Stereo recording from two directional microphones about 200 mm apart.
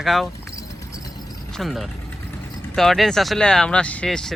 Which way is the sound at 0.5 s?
15° left (ahead or behind).